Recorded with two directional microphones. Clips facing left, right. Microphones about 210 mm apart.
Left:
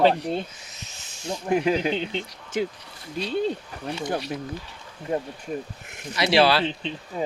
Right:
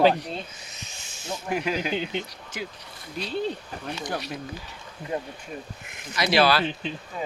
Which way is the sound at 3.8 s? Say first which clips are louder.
Left 4 dB; 25° left (ahead or behind).